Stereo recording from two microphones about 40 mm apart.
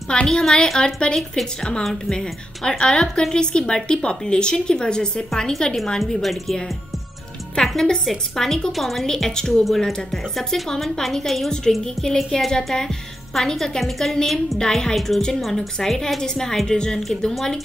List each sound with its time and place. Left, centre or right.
0.1 s a woman's voice: centre
7.6 s a woman's voice: centre
8.7 s a woman's voice: centre
9.0 s a woman's voice: centre
14.6 s a woman's voice: centre
15.0 s a woman's voice: centre
17.3 s a woman's voice: centre